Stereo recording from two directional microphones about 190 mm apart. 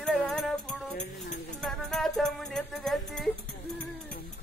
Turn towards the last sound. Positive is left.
turn(degrees=0)  # may be behind; listen again after turning